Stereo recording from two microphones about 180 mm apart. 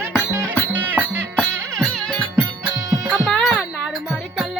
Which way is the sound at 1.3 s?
5° left (ahead or behind).